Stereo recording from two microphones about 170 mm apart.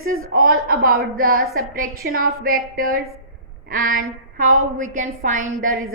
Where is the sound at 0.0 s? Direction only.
55° right (ahead or behind).